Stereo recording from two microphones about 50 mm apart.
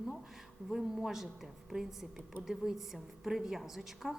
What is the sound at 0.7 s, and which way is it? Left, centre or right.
A woman's voice, centre.